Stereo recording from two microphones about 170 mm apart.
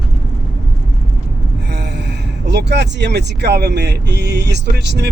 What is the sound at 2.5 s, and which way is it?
Speech, 85° right.